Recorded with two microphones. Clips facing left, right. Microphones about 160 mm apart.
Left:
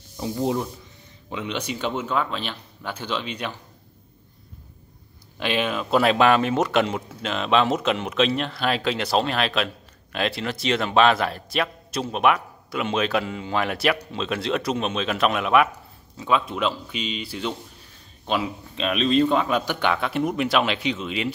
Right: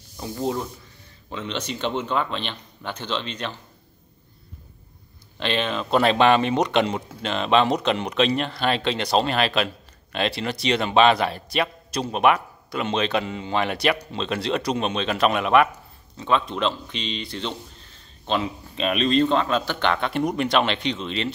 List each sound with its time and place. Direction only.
0.2 s a man's voice: 15° left (ahead or behind)
5.4 s a man's voice: 10° left (ahead or behind)